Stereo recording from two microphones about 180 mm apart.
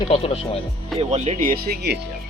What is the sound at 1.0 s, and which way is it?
Speech, 35° right (ahead or behind).